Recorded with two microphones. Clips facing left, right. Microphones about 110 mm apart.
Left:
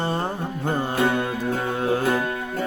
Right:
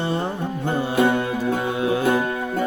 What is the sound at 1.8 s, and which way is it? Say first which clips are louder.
Music: left 1 dB; 45° left (ahead or behind).